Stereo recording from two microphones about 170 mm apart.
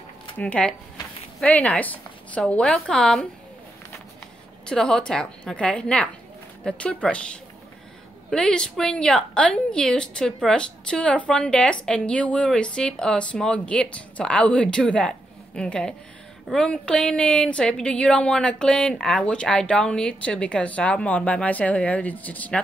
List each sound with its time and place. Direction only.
0.4 s a woman's voice: 5° left (ahead or behind)
4.6 s a woman's voice: 5° left (ahead or behind)